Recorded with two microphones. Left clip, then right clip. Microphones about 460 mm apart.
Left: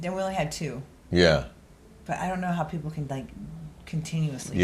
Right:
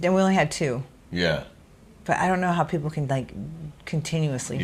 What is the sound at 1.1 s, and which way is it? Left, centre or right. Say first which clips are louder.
Speech: left 4 dB; left.